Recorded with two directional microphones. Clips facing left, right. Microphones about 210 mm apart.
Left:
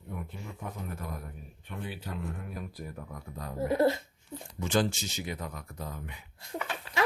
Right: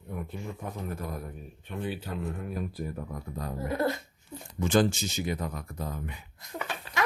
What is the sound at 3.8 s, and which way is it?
Speech, 25° left (ahead or behind).